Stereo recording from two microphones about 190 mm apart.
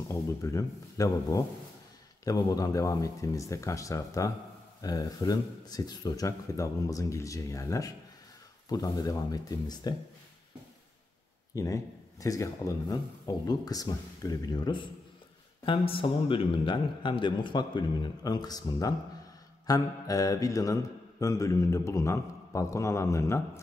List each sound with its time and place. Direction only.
0.1 s mantra: 15° left (ahead or behind)
8.6 s speech: 20° left (ahead or behind)
11.5 s speech: 15° left (ahead or behind)
19.6 s mantra: 20° left (ahead or behind)